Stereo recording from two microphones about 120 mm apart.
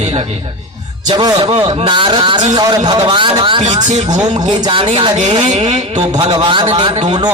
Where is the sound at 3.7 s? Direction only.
80° right.